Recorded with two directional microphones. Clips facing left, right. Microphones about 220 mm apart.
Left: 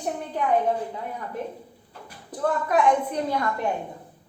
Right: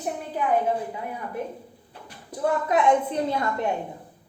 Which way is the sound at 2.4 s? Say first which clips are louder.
Even; 20° right (ahead or behind).